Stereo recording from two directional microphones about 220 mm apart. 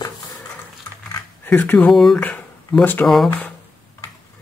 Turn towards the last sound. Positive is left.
turn(degrees=5)  # may be behind; listen again after turning